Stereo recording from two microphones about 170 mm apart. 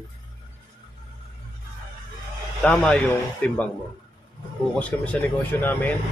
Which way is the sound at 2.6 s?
5° left (ahead or behind).